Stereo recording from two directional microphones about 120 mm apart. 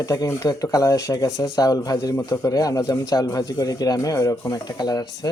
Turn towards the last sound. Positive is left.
turn(degrees=30)  # may be behind; listen again after turning